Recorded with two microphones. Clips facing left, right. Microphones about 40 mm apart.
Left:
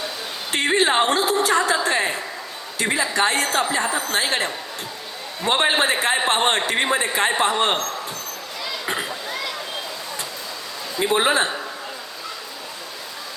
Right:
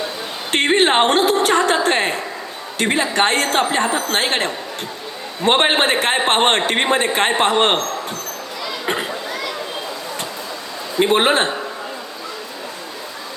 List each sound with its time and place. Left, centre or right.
0.5 s a man's voice: right
11.0 s a man's voice: right